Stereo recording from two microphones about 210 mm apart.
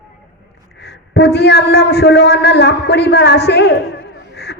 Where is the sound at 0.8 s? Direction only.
55° left (ahead or behind).